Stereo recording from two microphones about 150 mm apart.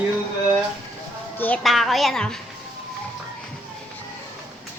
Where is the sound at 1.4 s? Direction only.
10° left (ahead or behind).